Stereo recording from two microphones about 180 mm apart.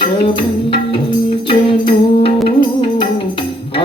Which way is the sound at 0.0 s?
30° left (ahead or behind).